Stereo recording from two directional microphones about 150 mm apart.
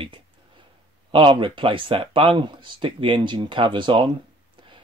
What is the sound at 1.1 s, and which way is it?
Speech, 35° right (ahead or behind).